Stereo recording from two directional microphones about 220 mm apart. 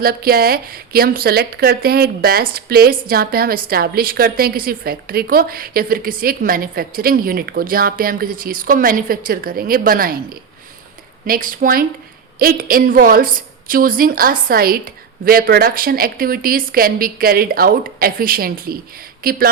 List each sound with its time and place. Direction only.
0.0 s a woman's voice: 45° right (ahead or behind)
11.3 s a woman's voice: 40° right (ahead or behind)